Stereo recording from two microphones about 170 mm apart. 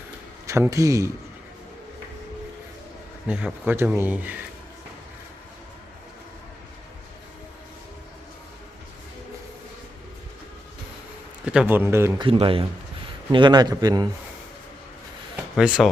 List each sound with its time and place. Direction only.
0.4 s a man's voice: 15° right (ahead or behind)
3.2 s speech: 10° right (ahead or behind)
11.4 s speech: 10° right (ahead or behind)
12.2 s a man's voice: 30° right (ahead or behind)
15.5 s speech: 5° right (ahead or behind)